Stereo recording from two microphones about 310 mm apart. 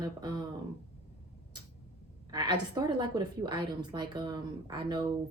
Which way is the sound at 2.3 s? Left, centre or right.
Centre.